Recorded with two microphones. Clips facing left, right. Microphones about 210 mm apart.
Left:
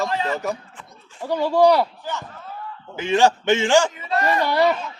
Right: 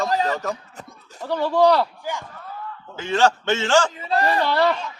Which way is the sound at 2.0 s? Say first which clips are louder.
Right 1 dB; 10° right (ahead or behind).